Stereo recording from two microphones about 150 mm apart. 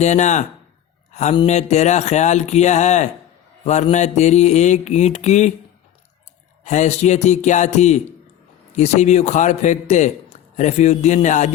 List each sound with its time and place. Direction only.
0.0 s a man's voice: 50° left (ahead or behind)
6.7 s a man's voice: 50° left (ahead or behind)